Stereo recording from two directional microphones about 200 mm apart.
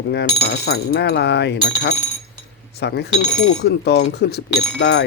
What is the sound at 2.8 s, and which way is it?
Speech, 55° left (ahead or behind).